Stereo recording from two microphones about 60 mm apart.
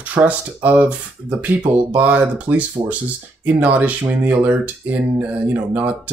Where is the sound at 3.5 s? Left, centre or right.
Right.